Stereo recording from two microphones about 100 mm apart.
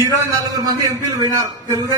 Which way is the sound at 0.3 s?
40° right (ahead or behind).